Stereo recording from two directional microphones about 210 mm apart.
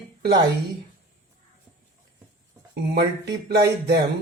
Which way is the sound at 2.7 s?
50° right (ahead or behind).